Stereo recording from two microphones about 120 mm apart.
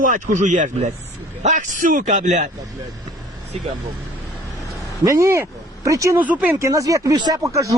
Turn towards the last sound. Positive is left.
turn(degrees=-25)  # may be behind; listen again after turning